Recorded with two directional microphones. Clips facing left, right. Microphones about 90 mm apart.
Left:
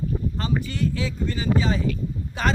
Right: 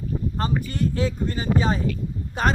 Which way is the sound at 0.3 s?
45° right (ahead or behind).